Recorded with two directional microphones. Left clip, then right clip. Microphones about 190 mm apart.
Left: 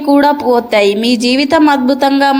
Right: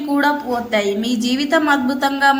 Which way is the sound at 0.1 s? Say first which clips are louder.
Left 9 dB; 35° left (ahead or behind).